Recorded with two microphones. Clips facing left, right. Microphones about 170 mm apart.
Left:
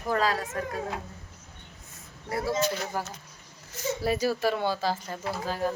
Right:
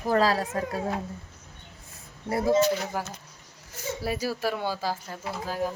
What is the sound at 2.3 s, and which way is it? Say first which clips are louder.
Speech: right 6 dB; 25° right (ahead or behind).